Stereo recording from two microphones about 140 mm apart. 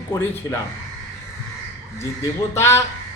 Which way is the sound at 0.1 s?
20° left (ahead or behind).